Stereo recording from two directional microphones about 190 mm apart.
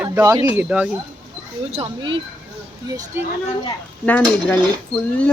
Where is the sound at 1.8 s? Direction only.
25° right (ahead or behind).